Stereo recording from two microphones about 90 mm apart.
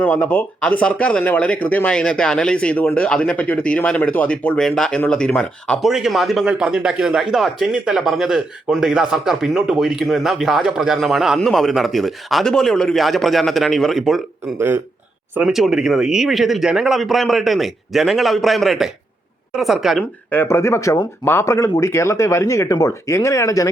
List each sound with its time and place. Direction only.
0.0 s speech: 15° left (ahead or behind)
5.8 s a man's voice: 5° right (ahead or behind)
15.4 s speech: 5° right (ahead or behind)
20.3 s speech: 25° left (ahead or behind)